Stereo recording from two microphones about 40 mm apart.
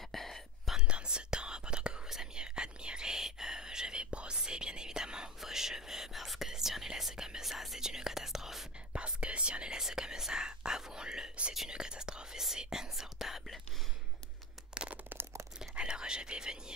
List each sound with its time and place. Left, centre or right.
0.1 s whispering: centre
0.7 s whispering: right; by 8.6 s centre
8.9 s whispering: right
9.8 s whispering: centre
14.7 s a sound: right
15.7 s whispering: right